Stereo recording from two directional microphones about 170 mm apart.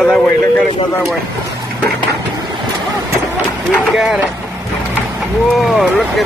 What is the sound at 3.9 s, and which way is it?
Speech, centre (ahead or behind).